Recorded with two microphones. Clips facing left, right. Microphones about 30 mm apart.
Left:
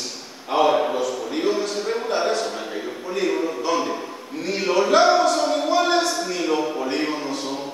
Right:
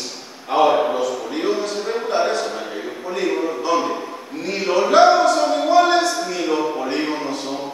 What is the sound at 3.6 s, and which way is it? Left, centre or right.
Music, centre.